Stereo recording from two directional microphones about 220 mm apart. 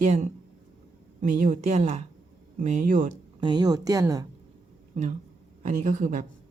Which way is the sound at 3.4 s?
20° right (ahead or behind).